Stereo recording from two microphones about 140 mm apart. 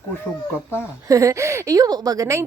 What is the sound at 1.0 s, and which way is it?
A woman's voice, 25° right (ahead or behind).